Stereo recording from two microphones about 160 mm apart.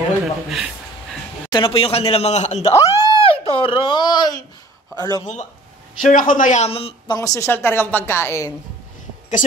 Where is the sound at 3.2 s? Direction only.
35° left (ahead or behind).